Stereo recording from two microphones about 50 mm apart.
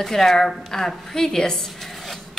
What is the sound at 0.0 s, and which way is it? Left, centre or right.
Speech, centre.